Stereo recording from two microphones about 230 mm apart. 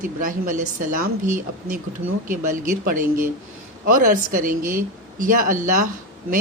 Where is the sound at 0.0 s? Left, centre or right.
Right.